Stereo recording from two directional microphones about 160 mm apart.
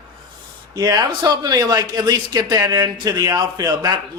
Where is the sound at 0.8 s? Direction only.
25° right (ahead or behind).